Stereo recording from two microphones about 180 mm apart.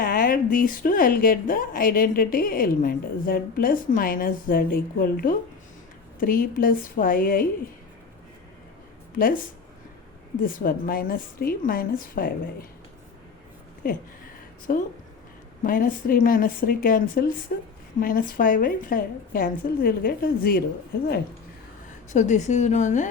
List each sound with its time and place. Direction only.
0.0 s a woman's voice: 50° left (ahead or behind)
9.1 s a woman's voice: 50° left (ahead or behind)
10.4 s a woman's voice: 50° left (ahead or behind)
13.8 s a woman's voice: 50° left (ahead or behind)
22.1 s a woman's voice: 40° left (ahead or behind)